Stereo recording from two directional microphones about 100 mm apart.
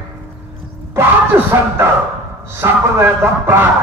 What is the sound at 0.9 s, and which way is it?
A man's voice, 25° right (ahead or behind).